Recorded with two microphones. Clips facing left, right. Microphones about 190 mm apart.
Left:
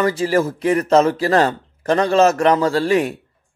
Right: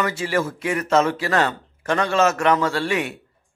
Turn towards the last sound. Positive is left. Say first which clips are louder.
# left 6 dB
turn(degrees=35)  # may be behind; listen again after turning